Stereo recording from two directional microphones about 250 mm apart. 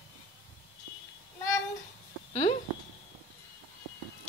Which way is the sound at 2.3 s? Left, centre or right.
Left.